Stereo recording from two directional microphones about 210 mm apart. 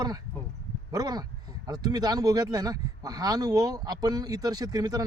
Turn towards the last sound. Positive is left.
turn(degrees=-15)  # may be behind; listen again after turning